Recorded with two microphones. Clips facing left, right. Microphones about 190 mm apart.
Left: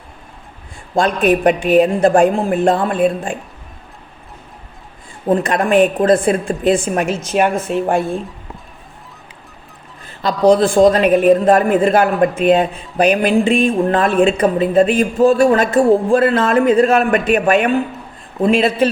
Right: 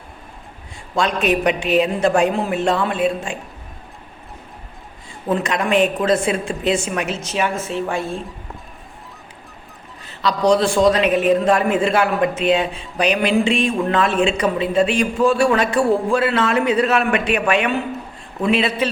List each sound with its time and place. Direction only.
0.9 s a man's voice: 50° left (ahead or behind)
5.3 s a man's voice: 55° left (ahead or behind)
10.1 s a man's voice: 50° left (ahead or behind)